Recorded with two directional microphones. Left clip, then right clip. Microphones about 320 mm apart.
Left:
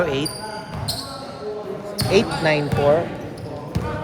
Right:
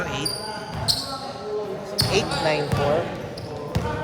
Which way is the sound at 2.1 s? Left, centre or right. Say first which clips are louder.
Left 5 dB; left.